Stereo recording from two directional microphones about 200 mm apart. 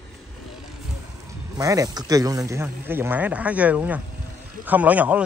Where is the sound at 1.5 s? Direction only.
15° right (ahead or behind).